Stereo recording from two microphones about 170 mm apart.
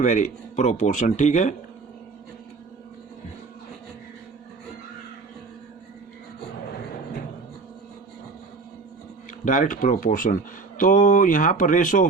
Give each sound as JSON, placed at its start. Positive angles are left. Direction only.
{"t": 0.0, "sound": "speech", "side_deg": 45}
{"t": 9.4, "sound": "speech", "side_deg": 50}